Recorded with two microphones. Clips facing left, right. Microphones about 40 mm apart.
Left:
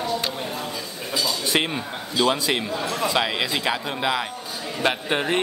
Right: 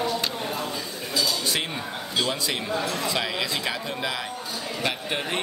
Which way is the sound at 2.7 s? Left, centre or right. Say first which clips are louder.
Even; centre.